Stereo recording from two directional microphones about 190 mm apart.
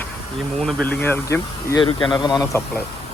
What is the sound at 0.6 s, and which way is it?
Speech, 5° left (ahead or behind).